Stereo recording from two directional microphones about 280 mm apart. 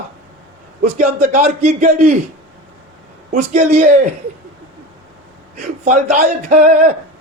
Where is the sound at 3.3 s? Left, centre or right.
Right.